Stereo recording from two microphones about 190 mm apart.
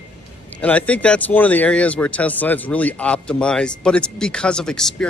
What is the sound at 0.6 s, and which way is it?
Speech, 5° left (ahead or behind).